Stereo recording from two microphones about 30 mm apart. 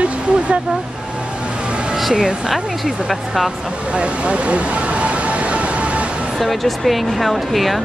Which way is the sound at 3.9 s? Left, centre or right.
Right.